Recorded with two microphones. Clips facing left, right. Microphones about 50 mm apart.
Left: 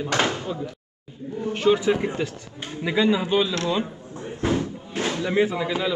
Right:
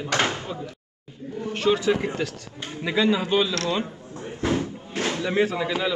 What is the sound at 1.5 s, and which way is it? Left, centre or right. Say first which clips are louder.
A man's voice: left 2 dB; centre.